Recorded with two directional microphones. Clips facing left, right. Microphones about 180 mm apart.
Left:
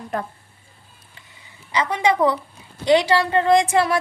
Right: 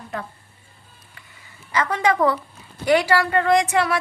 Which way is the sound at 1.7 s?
15° left (ahead or behind).